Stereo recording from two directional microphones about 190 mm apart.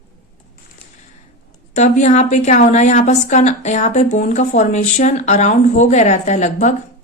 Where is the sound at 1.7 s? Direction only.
40° left (ahead or behind).